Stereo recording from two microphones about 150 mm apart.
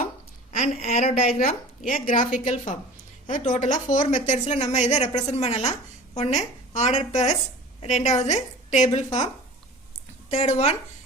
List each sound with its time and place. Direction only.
0.5 s a woman's voice: 50° left (ahead or behind)
1.5 s a woman's voice: 60° left (ahead or behind)